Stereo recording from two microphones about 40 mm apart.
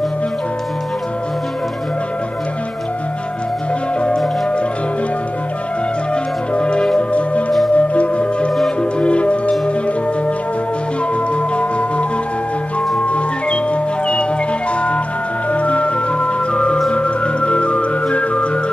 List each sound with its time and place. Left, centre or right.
6.5 s music: left
13.0 s music: left
15.5 s music: left